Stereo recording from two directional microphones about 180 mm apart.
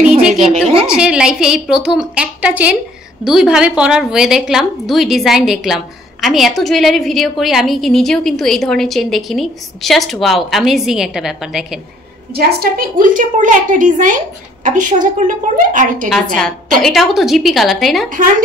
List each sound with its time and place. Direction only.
0.3 s a sound: 40° right (ahead or behind)
0.8 s a woman's voice: 5° right (ahead or behind)
12.4 s a woman's voice: 60° right (ahead or behind)
16.8 s a woman's voice: centre (ahead or behind)